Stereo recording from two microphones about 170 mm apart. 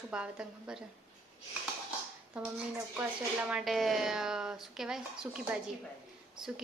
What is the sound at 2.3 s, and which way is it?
Speech, 10° right (ahead or behind).